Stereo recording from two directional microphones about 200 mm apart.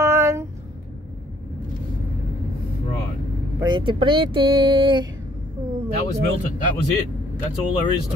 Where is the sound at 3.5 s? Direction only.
20° right (ahead or behind).